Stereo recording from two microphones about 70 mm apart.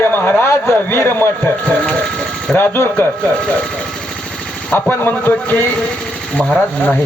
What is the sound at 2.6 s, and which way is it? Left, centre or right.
Speech, left.